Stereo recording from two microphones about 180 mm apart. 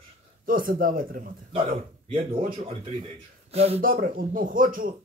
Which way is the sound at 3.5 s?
35° right (ahead or behind).